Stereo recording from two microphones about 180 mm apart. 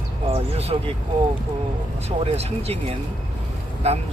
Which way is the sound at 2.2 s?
35° right (ahead or behind).